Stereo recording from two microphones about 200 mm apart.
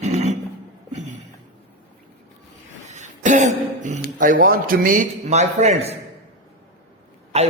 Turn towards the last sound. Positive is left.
turn(degrees=-35)  # may be behind; listen again after turning